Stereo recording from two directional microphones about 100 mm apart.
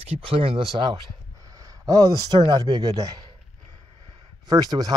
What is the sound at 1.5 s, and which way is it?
A man's voice, 35° right (ahead or behind).